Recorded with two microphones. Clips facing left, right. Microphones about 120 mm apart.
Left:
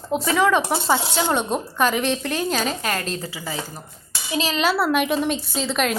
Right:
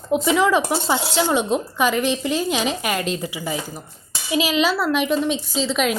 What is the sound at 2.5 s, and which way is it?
A woman's voice, 10° right (ahead or behind).